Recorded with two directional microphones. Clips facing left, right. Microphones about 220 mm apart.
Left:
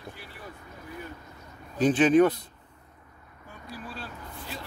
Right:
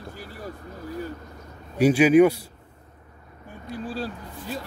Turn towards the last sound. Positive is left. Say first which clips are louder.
# right 9 dB
turn(degrees=-30)  # may be behind; listen again after turning